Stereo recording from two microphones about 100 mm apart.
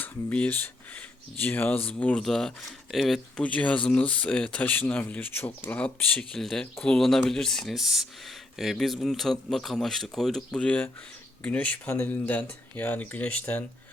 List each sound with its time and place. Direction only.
0.0 s speech: 15° left (ahead or behind)
3.4 s speech: 15° left (ahead or behind)